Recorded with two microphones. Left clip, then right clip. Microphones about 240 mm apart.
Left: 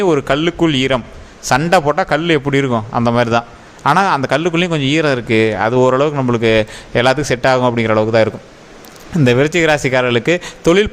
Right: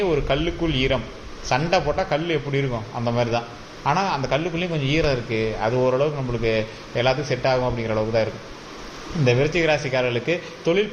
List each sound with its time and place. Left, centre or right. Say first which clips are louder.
0.0 s a man's voice: left 8 dB; left